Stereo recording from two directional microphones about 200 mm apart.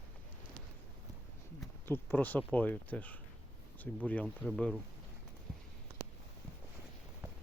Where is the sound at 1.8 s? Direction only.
10° left (ahead or behind).